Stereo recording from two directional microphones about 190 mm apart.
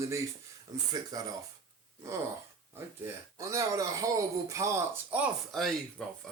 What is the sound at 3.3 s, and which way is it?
Speech, 15° right (ahead or behind).